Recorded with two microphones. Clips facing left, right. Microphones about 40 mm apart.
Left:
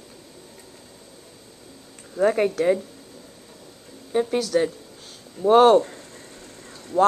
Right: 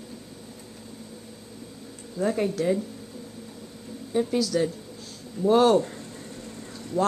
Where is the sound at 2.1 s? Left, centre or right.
Left.